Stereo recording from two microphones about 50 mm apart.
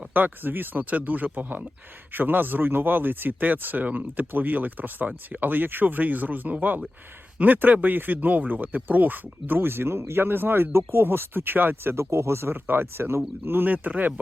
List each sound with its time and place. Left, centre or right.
0.1 s speech: right
9.6 s speech: right
12.5 s speech: right